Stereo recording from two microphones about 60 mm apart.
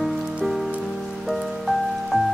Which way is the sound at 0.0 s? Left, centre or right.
Centre.